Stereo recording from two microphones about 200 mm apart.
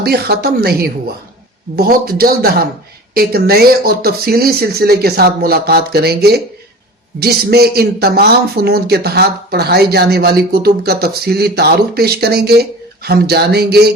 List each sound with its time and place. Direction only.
0.0 s a man's voice: 50° right (ahead or behind)